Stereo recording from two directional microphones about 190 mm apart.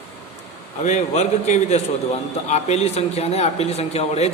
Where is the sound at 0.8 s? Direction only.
35° left (ahead or behind).